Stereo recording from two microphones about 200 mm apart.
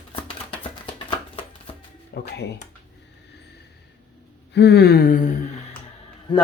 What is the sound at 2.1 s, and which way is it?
Music, 55° left (ahead or behind).